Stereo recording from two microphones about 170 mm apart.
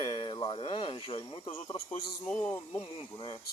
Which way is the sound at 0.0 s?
30° left (ahead or behind).